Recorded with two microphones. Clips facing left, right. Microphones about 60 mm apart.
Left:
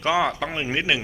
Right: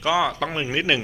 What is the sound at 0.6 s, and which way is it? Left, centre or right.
Speech, left.